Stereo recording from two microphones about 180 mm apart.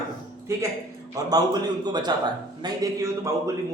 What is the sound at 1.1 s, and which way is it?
A man's voice, 20° right (ahead or behind).